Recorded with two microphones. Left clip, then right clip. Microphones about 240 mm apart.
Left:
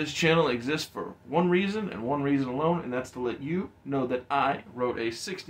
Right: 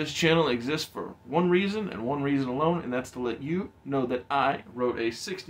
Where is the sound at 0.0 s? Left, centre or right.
Centre.